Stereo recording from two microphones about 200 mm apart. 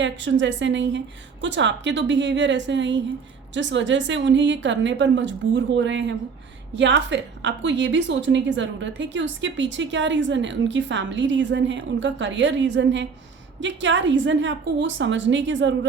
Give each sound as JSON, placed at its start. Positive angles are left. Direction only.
{"t": 0.0, "sound": "a woman's voice", "side_deg": -65}